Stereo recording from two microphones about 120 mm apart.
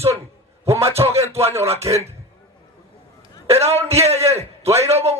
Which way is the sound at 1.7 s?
55° right (ahead or behind).